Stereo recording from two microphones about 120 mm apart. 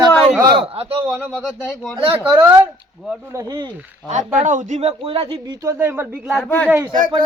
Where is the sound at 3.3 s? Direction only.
30° right (ahead or behind).